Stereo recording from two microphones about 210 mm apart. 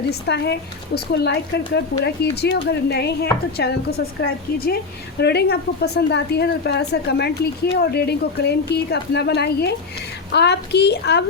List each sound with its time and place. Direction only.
0.1 s a woman's voice: 50° left (ahead or behind)